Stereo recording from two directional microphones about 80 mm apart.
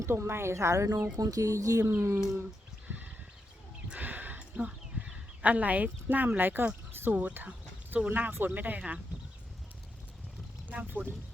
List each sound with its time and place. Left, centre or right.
0.0 s a woman's voice: right
1.1 s speech: right
1.9 s a woman's voice: right
3.8 s a sound: centre
6.9 s speech: right
10.7 s speech: right